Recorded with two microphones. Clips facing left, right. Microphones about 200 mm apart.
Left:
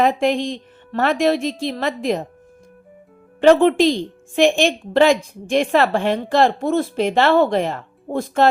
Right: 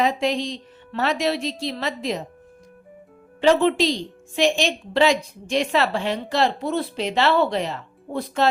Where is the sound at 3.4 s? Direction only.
50° left (ahead or behind).